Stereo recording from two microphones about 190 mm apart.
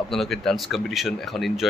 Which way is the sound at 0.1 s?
Centre (ahead or behind).